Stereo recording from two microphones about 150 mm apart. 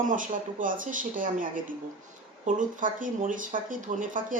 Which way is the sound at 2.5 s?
60° right (ahead or behind).